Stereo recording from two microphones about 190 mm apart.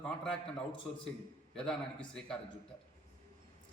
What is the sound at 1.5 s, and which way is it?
Speech, 5° left (ahead or behind).